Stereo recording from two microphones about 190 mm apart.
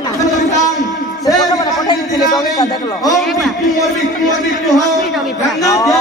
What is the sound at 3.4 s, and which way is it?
Speech, centre (ahead or behind).